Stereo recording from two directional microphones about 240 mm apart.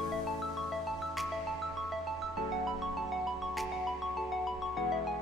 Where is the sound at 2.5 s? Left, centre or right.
Centre.